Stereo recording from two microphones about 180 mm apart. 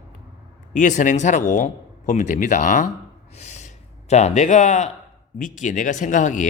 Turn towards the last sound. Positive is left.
turn(degrees=45)  # may be behind; listen again after turning